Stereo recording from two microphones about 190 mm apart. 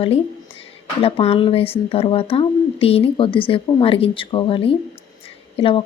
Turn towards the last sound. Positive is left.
turn(degrees=30)  # may be behind; listen again after turning